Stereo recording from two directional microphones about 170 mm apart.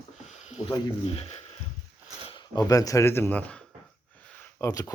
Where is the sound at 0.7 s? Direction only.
35° left (ahead or behind).